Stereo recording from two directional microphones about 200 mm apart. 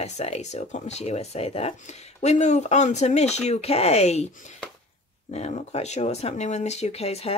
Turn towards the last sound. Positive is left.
turn(degrees=30)  # may be behind; listen again after turning